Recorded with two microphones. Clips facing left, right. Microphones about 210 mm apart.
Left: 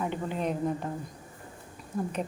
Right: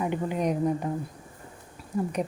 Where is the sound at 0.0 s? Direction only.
10° right (ahead or behind).